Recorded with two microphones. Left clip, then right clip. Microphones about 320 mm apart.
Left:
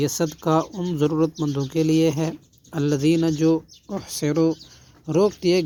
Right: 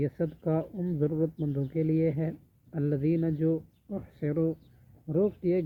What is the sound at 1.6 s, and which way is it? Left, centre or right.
Speech, left.